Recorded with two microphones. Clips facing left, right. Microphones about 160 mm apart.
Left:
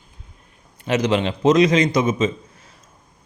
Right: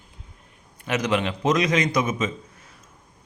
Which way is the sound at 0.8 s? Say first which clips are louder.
Left 4 dB; 30° left (ahead or behind).